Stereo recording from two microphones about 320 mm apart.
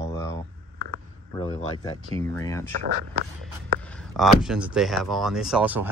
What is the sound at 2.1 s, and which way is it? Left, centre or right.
Speech, centre.